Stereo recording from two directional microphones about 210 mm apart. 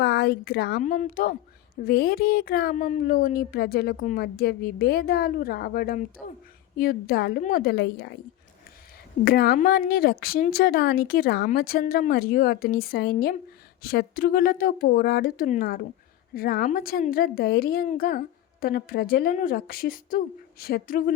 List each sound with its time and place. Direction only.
0.0 s a woman's voice: 50° left (ahead or behind)
0.8 s a woman's voice: 35° left (ahead or behind)
9.2 s speech: 45° left (ahead or behind)